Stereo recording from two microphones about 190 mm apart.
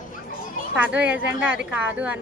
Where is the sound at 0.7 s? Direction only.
5° right (ahead or behind).